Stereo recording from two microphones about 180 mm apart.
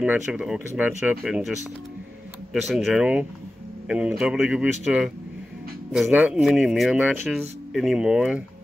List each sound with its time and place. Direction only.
0.0 s speech: 5° right (ahead or behind)
2.7 s speech: centre (ahead or behind)